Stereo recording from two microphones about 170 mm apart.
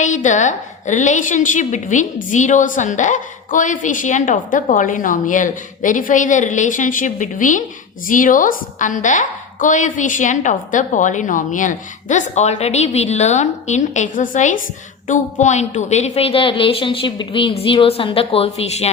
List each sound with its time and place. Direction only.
0.0 s a woman's voice: 45° left (ahead or behind)